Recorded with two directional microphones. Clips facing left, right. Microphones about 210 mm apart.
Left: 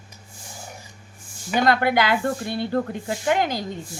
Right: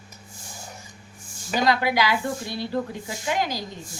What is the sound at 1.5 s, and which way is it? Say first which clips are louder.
Speech: left 3 dB; 55° left (ahead or behind).